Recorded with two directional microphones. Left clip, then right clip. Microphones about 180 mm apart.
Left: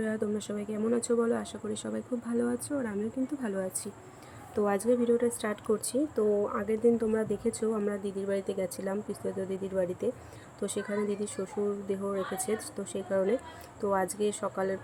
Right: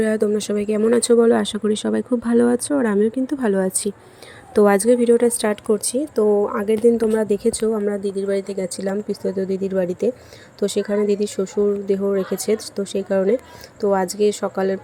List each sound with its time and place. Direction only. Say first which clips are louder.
0.0 s a woman's voice: right 14 dB; 30° right (ahead or behind)
5.6 s speech: right 9 dB; 20° right (ahead or behind)